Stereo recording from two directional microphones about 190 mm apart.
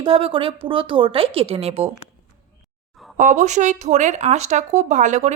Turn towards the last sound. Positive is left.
turn(degrees=-40)  # may be behind; listen again after turning